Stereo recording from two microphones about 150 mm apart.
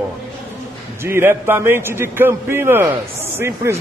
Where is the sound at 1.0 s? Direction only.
15° right (ahead or behind).